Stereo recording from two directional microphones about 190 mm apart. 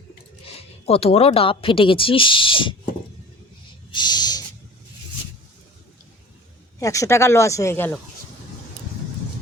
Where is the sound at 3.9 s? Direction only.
20° left (ahead or behind).